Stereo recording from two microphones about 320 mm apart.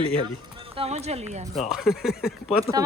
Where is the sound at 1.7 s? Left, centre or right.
Centre.